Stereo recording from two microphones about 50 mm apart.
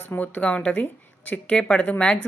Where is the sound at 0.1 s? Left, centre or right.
Left.